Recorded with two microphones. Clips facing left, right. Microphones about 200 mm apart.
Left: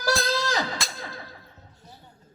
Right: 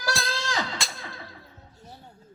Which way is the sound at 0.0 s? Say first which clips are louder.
Left 5 dB; 40° left (ahead or behind).